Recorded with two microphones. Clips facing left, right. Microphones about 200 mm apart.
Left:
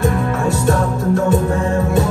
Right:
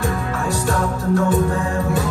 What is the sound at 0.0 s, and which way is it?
Music, 25° left (ahead or behind).